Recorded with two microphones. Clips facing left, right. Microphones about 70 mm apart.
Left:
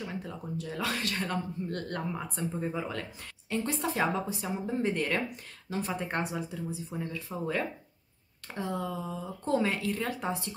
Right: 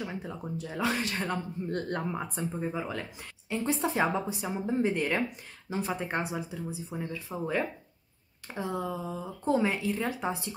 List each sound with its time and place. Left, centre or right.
0.0 s speech: centre
2.5 s speech: centre